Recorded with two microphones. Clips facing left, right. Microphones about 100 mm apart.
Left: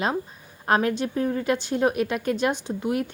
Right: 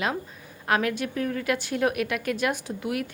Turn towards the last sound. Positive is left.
turn(degrees=25)  # may be behind; listen again after turning